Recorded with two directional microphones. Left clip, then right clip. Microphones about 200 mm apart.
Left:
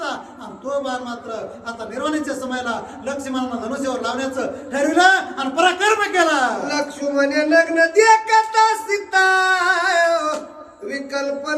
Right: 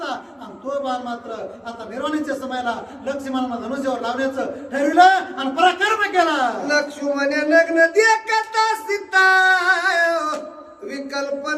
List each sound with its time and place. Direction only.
0.7 s a man's voice: 10° left (ahead or behind)
6.7 s music: 20° right (ahead or behind)
10.8 s speech: 20° right (ahead or behind)